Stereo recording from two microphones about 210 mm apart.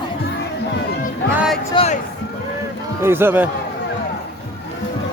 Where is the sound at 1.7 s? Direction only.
25° left (ahead or behind).